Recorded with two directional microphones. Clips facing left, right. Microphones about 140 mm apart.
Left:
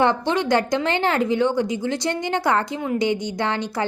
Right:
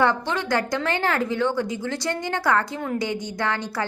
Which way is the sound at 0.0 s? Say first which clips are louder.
Left 3 dB; 20° left (ahead or behind).